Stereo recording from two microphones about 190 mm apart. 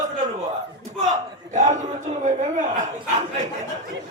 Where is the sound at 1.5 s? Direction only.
40° right (ahead or behind).